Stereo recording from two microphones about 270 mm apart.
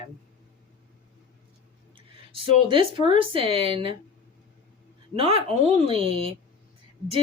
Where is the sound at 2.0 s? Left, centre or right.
Centre.